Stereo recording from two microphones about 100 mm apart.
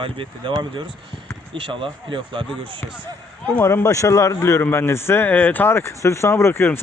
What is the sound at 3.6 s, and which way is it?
Speech, 25° left (ahead or behind).